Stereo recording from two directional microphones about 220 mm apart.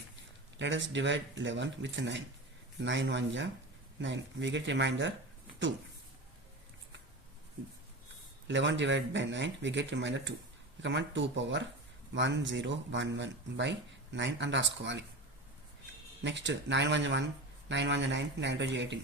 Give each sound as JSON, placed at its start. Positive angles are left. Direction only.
{"t": 0.6, "sound": "speech", "side_deg": -55}
{"t": 8.4, "sound": "speech", "side_deg": -55}
{"t": 16.2, "sound": "speech", "side_deg": -55}